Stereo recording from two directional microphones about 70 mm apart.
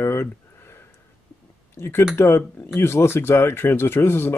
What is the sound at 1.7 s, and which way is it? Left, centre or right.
Speech, left.